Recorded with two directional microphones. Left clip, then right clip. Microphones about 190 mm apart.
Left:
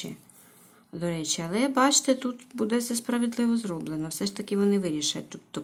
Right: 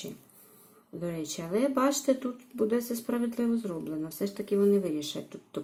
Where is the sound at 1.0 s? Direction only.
15° left (ahead or behind).